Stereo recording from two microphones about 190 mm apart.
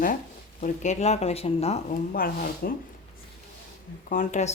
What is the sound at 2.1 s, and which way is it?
Speech, 50° left (ahead or behind).